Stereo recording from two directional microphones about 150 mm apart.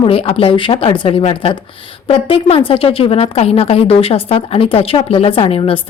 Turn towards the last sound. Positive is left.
turn(degrees=40)  # may be behind; listen again after turning